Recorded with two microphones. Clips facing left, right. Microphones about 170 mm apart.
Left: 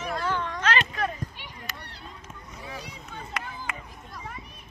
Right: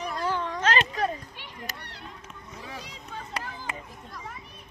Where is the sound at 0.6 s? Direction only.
35° right (ahead or behind).